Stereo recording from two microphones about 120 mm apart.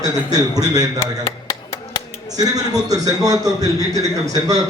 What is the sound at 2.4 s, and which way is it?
A man's voice, 30° right (ahead or behind).